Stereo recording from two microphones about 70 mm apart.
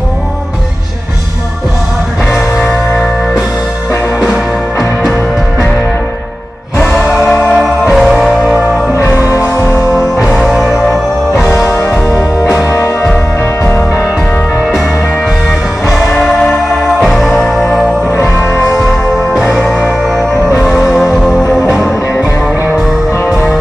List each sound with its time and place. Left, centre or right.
7.2 s music: centre
8.9 s music: left
10.5 s music: centre
12.4 s music: left
15.9 s music: centre
18.1 s music: left
20.7 s music: centre